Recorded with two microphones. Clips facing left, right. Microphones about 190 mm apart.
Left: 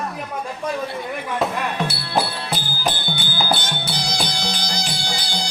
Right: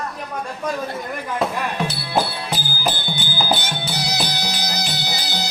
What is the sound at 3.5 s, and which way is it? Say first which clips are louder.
Music: right 2 dB; 5° right (ahead or behind).